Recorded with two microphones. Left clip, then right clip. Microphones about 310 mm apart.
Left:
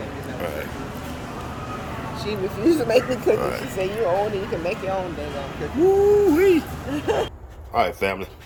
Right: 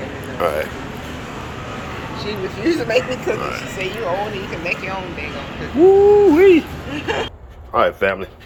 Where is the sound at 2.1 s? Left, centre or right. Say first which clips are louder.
Right 1 dB; left.